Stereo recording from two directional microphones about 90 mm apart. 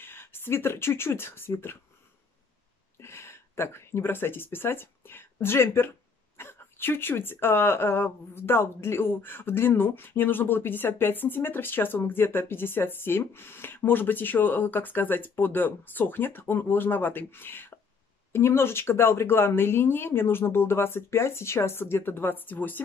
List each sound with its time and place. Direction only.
0.0 s speech: 25° left (ahead or behind)
3.0 s speech: 30° left (ahead or behind)